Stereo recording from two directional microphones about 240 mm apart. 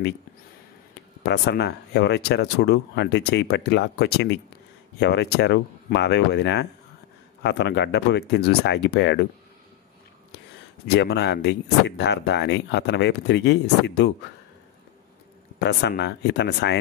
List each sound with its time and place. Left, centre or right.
1.2 s speech: left
10.9 s speech: left
15.6 s speech: left